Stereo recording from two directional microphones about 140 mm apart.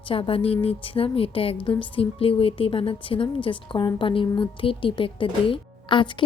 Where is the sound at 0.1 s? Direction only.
40° left (ahead or behind).